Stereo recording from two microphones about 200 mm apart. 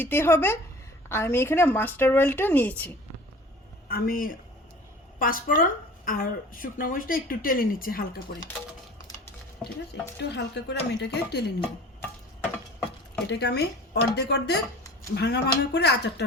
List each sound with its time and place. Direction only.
0.0 s speech: 10° left (ahead or behind)
3.8 s a woman's voice: 45° left (ahead or behind)
10.2 s speech: 55° left (ahead or behind)
13.2 s speech: 55° left (ahead or behind)